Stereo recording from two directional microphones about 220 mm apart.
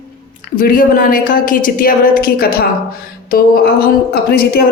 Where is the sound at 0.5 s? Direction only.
40° left (ahead or behind).